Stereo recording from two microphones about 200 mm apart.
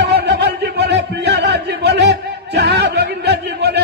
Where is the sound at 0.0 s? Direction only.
60° right (ahead or behind).